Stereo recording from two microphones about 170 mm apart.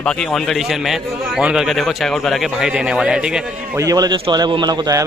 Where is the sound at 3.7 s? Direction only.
20° right (ahead or behind).